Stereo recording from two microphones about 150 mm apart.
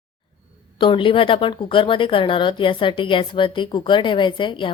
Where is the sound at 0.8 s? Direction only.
35° left (ahead or behind).